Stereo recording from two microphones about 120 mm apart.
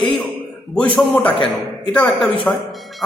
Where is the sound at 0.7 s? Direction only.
10° left (ahead or behind).